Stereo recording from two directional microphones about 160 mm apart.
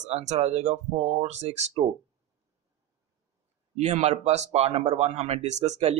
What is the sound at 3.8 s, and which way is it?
A man's voice, 45° right (ahead or behind).